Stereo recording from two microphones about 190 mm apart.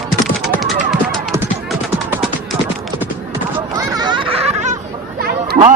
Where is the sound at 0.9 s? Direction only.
Centre (ahead or behind).